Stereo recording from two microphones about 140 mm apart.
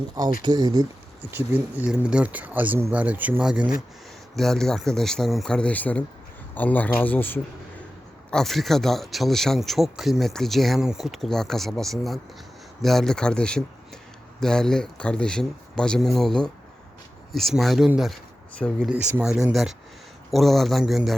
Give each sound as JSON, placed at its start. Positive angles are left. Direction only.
{"t": 0.4, "sound": "speech", "side_deg": -30}
{"t": 1.2, "sound": "speech", "side_deg": -10}
{"t": 8.3, "sound": "speech", "side_deg": 5}
{"t": 18.5, "sound": "speech", "side_deg": 5}
{"t": 19.2, "sound": "speech", "side_deg": -5}